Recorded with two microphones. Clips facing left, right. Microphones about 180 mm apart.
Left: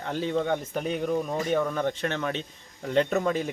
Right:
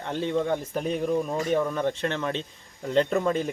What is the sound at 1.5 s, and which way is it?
Speech, centre (ahead or behind).